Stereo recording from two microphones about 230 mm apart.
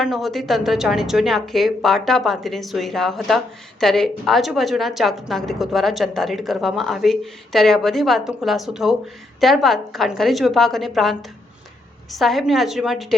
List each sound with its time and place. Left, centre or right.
0.0 s a woman's voice: centre